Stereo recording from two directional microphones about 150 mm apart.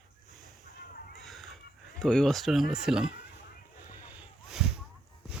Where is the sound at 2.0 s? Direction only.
5° left (ahead or behind).